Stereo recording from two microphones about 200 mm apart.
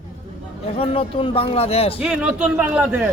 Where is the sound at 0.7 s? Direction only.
30° left (ahead or behind).